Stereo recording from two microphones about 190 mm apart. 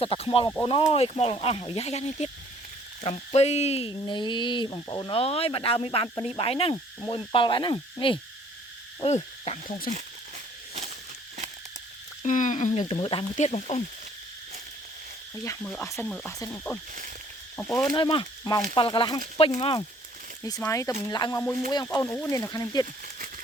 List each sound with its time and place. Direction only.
0.0 s speech: 30° left (ahead or behind)
9.0 s cricket: 35° left (ahead or behind)
12.2 s speech: 40° left (ahead or behind)
15.4 s speech: 10° left (ahead or behind)
17.9 s speech: 25° left (ahead or behind)
20.7 s speech: 15° left (ahead or behind)